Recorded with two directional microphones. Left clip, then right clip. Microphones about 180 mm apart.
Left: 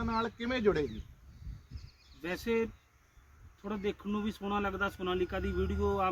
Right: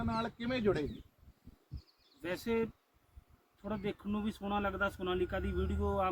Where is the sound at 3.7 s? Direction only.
25° right (ahead or behind).